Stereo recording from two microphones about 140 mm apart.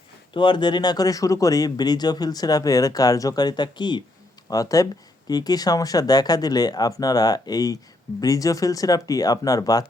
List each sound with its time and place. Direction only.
0.3 s speech: 35° left (ahead or behind)